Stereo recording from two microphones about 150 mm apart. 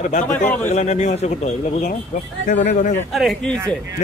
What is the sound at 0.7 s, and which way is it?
Speech, 50° left (ahead or behind).